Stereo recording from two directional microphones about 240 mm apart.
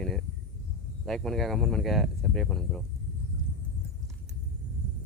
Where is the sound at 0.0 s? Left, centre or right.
Centre.